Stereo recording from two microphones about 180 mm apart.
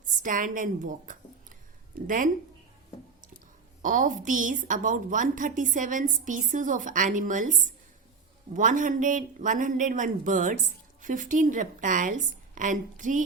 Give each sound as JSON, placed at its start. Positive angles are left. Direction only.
{"t": 0.1, "sound": "a woman's voice", "side_deg": -45}
{"t": 3.8, "sound": "a woman's voice", "side_deg": -45}
{"t": 8.5, "sound": "a woman's voice", "side_deg": -45}